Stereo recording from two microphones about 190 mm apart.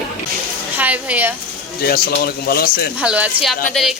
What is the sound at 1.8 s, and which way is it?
Speech, 55° left (ahead or behind).